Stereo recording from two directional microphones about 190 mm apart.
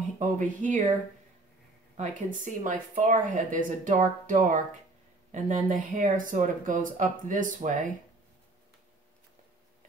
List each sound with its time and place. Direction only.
0.2 s speech: 40° right (ahead or behind)
2.0 s speech: 40° right (ahead or behind)